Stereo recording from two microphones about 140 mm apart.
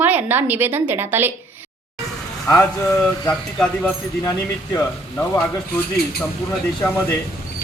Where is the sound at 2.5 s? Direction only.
25° left (ahead or behind).